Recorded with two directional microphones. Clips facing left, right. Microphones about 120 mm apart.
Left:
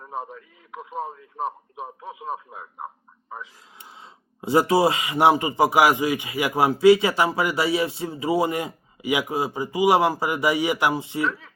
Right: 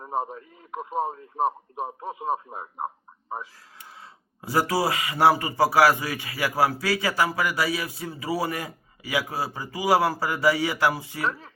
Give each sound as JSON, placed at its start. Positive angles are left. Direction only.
{"t": 0.0, "sound": "a man's voice", "side_deg": -35}
{"t": 4.4, "sound": "a man's voice", "side_deg": 20}
{"t": 11.2, "sound": "a man's voice", "side_deg": -35}